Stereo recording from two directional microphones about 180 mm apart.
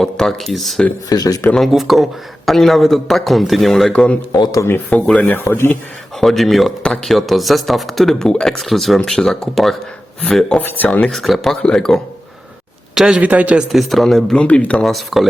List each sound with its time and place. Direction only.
0.0 s speech: centre (ahead or behind)
1.1 s speech: 20° left (ahead or behind)
1.5 s speech: centre (ahead or behind)
4.3 s speech: 20° left (ahead or behind)
4.9 s speech: 5° left (ahead or behind)
6.1 s speech: centre (ahead or behind)